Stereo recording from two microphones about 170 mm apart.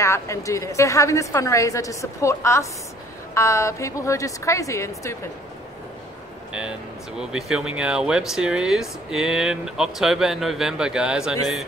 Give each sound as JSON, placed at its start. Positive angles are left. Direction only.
{"t": 0.0, "sound": "a woman's voice", "side_deg": 15}
{"t": 7.2, "sound": "speech", "side_deg": -5}